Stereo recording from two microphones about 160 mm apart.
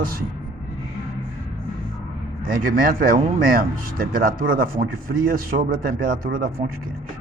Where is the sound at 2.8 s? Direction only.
65° right (ahead or behind).